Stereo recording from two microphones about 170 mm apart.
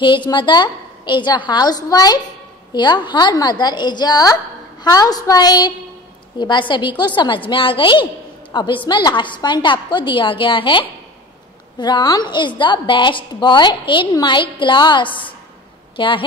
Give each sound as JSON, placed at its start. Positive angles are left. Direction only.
{"t": 0.0, "sound": "a woman's voice", "side_deg": 25}